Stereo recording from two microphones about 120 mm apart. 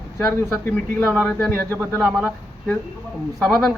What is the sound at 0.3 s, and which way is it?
Speech, 15° left (ahead or behind).